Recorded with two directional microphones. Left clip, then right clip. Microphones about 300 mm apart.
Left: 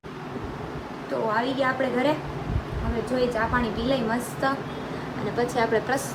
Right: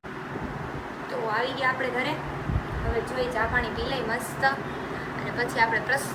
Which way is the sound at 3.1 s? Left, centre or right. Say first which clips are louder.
Left 3 dB; left.